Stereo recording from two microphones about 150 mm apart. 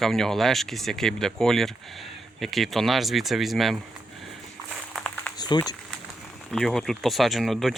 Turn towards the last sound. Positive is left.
turn(degrees=0)  # may be behind; listen again after turning